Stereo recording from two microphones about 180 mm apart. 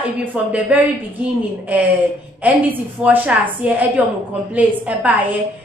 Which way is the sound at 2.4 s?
10° right (ahead or behind).